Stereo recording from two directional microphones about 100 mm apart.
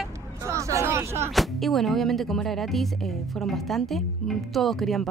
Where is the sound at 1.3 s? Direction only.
Centre (ahead or behind).